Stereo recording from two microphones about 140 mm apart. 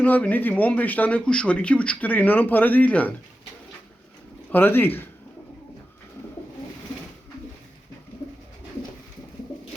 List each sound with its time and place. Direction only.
0.0 s speech: 10° left (ahead or behind)
4.5 s speech: 15° left (ahead or behind)